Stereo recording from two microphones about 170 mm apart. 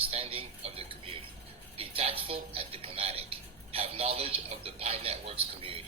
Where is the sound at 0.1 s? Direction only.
35° right (ahead or behind).